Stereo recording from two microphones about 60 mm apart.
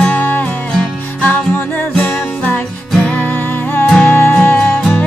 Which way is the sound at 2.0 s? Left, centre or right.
Centre.